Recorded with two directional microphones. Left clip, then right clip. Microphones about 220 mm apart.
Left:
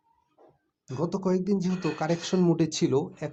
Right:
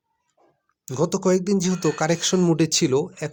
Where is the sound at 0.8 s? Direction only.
45° right (ahead or behind).